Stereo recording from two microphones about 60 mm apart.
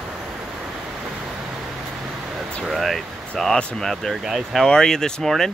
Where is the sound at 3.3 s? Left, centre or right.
Centre.